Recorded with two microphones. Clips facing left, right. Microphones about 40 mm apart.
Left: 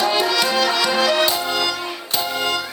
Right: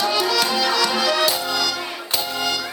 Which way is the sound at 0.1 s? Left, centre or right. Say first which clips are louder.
Left 1 dB; left.